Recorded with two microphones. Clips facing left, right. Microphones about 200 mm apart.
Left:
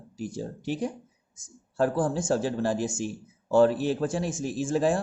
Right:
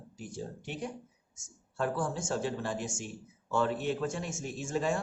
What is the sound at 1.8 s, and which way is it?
Speech, 35° left (ahead or behind).